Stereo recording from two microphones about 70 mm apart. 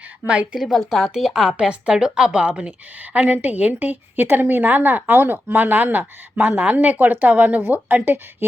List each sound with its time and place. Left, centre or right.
0.5 s speech: centre; by 8.4 s right